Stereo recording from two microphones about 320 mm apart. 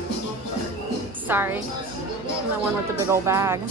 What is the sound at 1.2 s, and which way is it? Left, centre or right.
Speech, centre.